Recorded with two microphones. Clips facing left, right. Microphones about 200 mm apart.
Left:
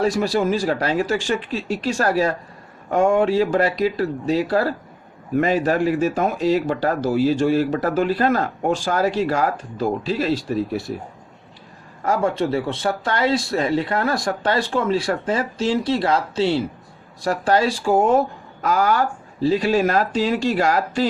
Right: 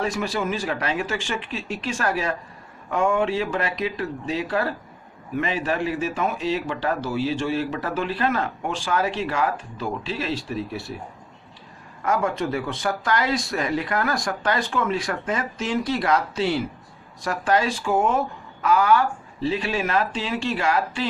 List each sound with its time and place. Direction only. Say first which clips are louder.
0.0 s speech: left 6 dB; 35° left (ahead or behind)
12.0 s speech: left 3 dB; 30° left (ahead or behind)